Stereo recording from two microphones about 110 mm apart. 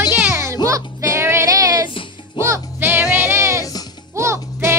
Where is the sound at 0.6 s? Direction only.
30° right (ahead or behind).